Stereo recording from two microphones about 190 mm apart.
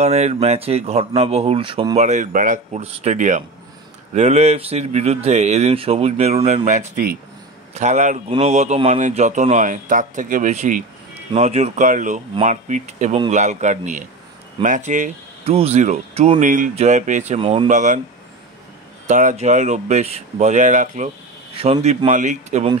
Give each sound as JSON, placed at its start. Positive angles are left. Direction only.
{"t": 0.0, "sound": "speech", "side_deg": -35}
{"t": 19.0, "sound": "speech", "side_deg": -40}
{"t": 21.5, "sound": "speech", "side_deg": -30}